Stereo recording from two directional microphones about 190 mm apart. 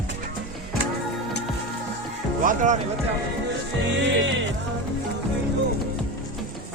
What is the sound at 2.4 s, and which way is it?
Speech, 40° right (ahead or behind).